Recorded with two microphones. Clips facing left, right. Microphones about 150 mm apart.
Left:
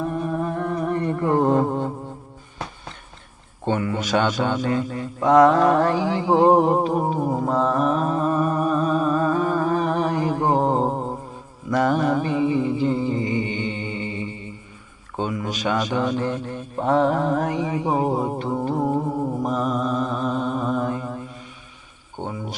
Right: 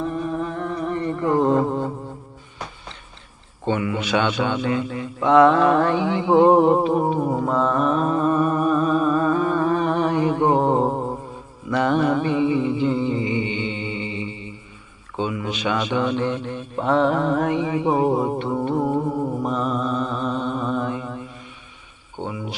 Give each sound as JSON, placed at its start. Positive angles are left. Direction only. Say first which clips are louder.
{"t": 0.0, "sound": "music", "louder": "even", "side_deg": 50}
{"t": 3.7, "sound": "a man's voice", "louder": "even", "side_deg": 40}
{"t": 7.3, "sound": "music", "louder": "even", "side_deg": 35}
{"t": 11.7, "sound": "a sound", "louder": "even", "side_deg": 40}
{"t": 15.1, "sound": "a man's voice", "louder": "right 1 dB", "side_deg": 40}
{"t": 19.4, "sound": "mantra", "louder": "even", "side_deg": 40}
{"t": 22.3, "sound": "speech", "louder": "right 1 dB", "side_deg": 40}